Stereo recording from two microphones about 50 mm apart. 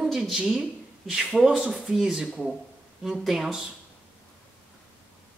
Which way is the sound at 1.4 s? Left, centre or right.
Centre.